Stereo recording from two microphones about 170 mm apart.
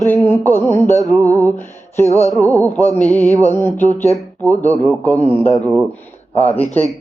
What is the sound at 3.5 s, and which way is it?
Speech, 10° left (ahead or behind).